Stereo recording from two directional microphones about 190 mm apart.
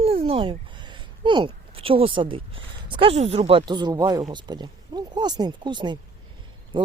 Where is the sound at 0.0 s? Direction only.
30° right (ahead or behind).